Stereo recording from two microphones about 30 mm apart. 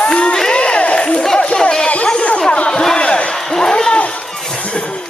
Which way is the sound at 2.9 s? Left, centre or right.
Left.